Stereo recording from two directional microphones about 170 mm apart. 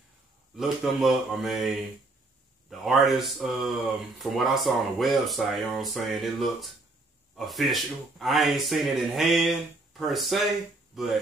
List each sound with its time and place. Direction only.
0.6 s speech: centre (ahead or behind)